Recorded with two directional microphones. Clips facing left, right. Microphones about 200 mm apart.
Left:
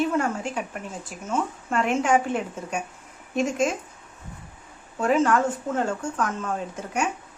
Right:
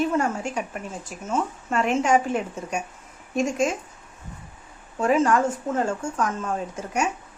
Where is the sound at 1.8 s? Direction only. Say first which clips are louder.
Right 1 dB; 5° left (ahead or behind).